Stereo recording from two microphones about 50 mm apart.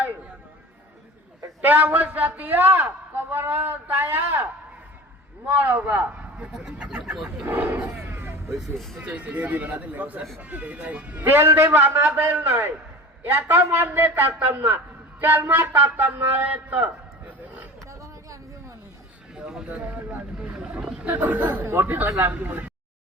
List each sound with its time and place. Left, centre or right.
1.6 s a man's voice: right
5.5 s a man's voice: right
7.4 s a man's voice: right
8.0 s vehicle: right
8.6 s speech: centre
9.0 s a man's voice: right
15.6 s a man's voice: right
17.8 s a sound: right
19.3 s a sound: centre
19.6 s a man's voice: right
20.7 s roaring cats: right
21.1 s a man's voice: right